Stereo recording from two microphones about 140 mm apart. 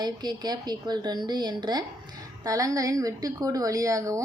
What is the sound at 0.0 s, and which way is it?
A woman's voice, 30° right (ahead or behind).